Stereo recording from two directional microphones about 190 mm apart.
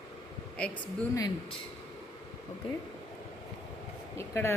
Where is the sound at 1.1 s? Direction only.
20° left (ahead or behind).